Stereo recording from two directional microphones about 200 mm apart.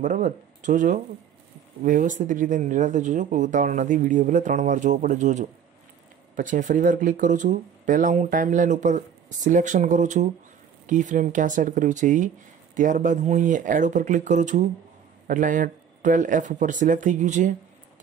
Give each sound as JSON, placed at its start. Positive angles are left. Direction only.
{"t": 0.0, "sound": "speech", "side_deg": -40}